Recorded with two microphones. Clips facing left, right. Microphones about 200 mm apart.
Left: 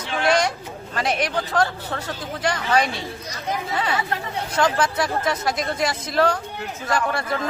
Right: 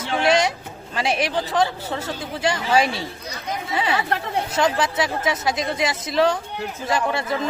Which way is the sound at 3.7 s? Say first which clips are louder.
Right 5 dB; 25° right (ahead or behind).